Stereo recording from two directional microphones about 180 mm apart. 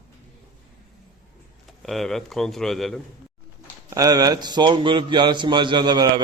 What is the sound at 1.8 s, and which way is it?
Speech, centre (ahead or behind).